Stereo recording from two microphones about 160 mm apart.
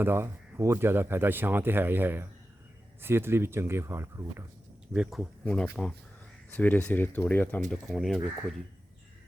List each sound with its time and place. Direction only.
0.0 s speech: 15° right (ahead or behind)
4.9 s speech: centre (ahead or behind)
7.7 s speech: centre (ahead or behind)